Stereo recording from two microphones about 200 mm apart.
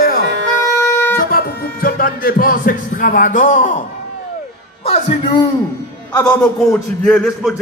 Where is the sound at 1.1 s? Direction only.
45° left (ahead or behind).